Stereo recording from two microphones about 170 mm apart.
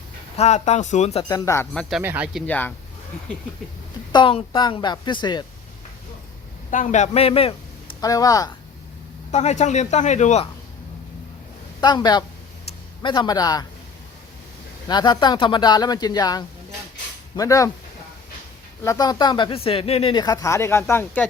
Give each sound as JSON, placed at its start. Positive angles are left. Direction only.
{"t": 0.3, "sound": "speech", "side_deg": 40}
{"t": 1.3, "sound": "speech", "side_deg": 15}
{"t": 1.7, "sound": "speech", "side_deg": 5}
{"t": 2.0, "sound": "speech", "side_deg": -10}
{"t": 2.5, "sound": "speech", "side_deg": 10}
{"t": 4.1, "sound": "speech", "side_deg": 30}
{"t": 6.7, "sound": "a man's voice", "side_deg": 45}
{"t": 8.0, "sound": "speech", "side_deg": 20}
{"t": 9.3, "sound": "speech", "side_deg": 40}
{"t": 11.8, "sound": "speech", "side_deg": 25}
{"t": 14.8, "sound": "speech", "side_deg": 25}
{"t": 18.8, "sound": "speech", "side_deg": 20}